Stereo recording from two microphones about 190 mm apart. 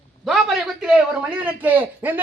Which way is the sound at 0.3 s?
Centre (ahead or behind).